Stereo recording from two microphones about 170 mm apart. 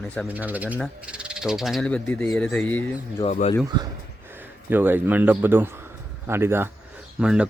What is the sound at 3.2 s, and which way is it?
Speech, 40° left (ahead or behind).